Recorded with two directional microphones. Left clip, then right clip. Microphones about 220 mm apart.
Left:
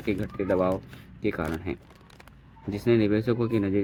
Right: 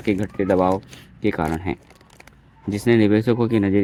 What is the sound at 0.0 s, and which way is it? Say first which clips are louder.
Speech: right 7 dB; 45° right (ahead or behind).